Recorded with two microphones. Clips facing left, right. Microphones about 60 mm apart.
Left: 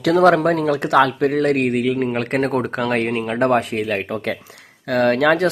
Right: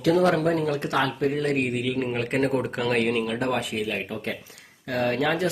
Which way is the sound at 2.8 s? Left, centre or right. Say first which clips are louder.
Left 3 dB; left.